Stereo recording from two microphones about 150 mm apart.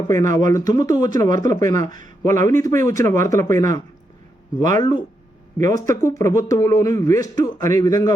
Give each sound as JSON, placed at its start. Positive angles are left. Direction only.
{"t": 0.1, "sound": "speech", "side_deg": 20}